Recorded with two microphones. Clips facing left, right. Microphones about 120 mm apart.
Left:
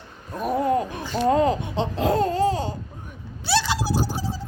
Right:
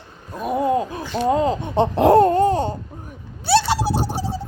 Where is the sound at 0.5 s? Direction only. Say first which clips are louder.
Right 2 dB; 20° right (ahead or behind).